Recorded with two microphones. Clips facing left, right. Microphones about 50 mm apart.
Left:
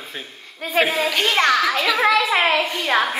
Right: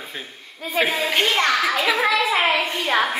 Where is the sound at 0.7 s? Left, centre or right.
Left.